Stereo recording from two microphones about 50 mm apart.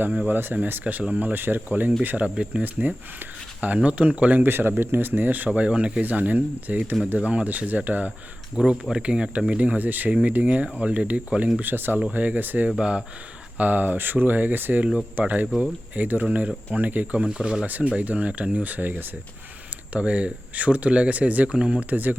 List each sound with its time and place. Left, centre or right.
0.3 s speech: right
2.0 s speech: right
4.4 s speech: right
5.5 s speech: right
8.5 s speech: centre
11.6 s speech: right
11.9 s speech: right
12.7 s speech: centre
13.6 s speech: right
17.2 s speech: centre
17.7 s speech: right
19.9 s speech: right
21.5 s speech: centre
21.8 s speech: right